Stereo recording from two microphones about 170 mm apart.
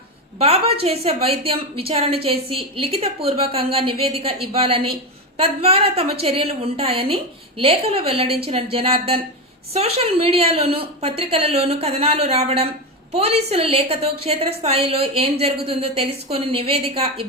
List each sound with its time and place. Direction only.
0.3 s a woman's voice: 35° right (ahead or behind)